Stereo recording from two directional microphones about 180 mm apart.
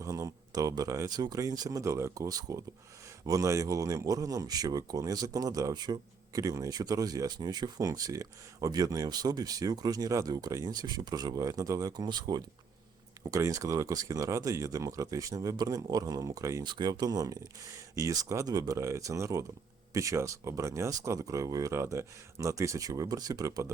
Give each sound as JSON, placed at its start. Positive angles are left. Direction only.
{"t": 0.0, "sound": "speech", "side_deg": -15}